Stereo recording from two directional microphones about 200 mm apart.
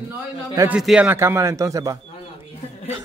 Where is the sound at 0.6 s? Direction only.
5° right (ahead or behind).